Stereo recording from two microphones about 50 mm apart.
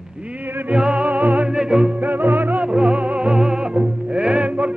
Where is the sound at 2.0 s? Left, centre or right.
Right.